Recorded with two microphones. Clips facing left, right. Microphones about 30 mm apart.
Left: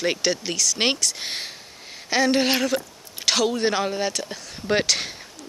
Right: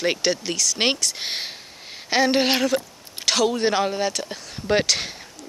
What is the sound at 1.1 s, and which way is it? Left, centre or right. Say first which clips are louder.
A woman's voice: right 2 dB; centre.